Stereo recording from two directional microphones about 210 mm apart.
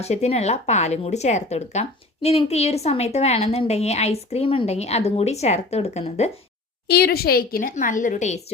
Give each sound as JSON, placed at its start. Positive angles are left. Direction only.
{"t": 0.0, "sound": "speech", "side_deg": 30}
{"t": 6.8, "sound": "speech", "side_deg": 45}